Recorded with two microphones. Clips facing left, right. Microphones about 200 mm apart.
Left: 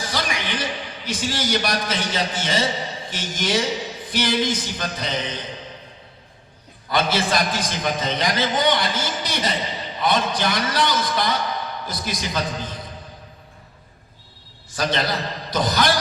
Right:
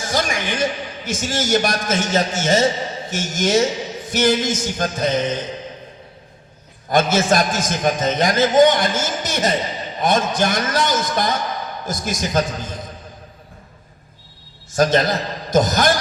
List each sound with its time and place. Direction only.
0.0 s a man's voice: 45° right (ahead or behind)
6.8 s a man's voice: 45° right (ahead or behind)
14.7 s a man's voice: 45° right (ahead or behind)